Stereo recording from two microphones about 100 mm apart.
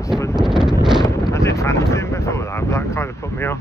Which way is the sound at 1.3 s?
30° left (ahead or behind).